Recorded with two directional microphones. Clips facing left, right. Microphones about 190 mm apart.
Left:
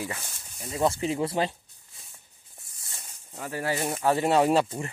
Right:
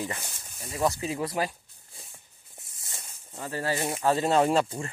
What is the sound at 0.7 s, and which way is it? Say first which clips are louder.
Speech: left 2 dB; 30° left (ahead or behind).